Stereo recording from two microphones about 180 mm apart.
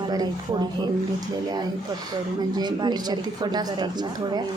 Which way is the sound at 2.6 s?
25° right (ahead or behind).